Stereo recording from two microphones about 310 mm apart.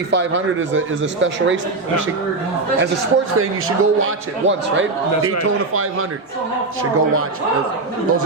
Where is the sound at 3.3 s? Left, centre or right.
Right.